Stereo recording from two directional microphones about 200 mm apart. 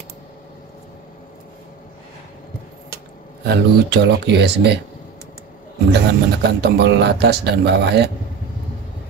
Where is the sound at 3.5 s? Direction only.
55° right (ahead or behind).